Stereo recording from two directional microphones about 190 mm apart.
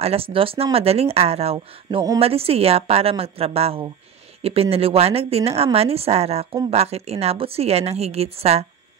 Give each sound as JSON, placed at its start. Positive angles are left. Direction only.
{"t": 0.0, "sound": "speech", "side_deg": -30}